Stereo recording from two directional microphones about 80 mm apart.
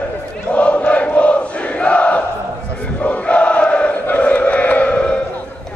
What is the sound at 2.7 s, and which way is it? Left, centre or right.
Chant, centre.